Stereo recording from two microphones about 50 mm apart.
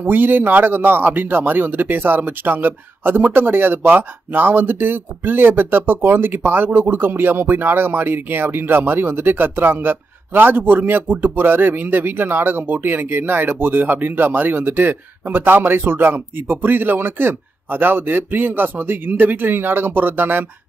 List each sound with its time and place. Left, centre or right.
0.0 s speech: right